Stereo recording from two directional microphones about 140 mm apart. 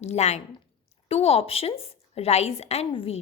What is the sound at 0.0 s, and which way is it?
A woman's voice, 50° left (ahead or behind).